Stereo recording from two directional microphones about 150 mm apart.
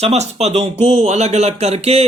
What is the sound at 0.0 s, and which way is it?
A man's voice, 45° right (ahead or behind).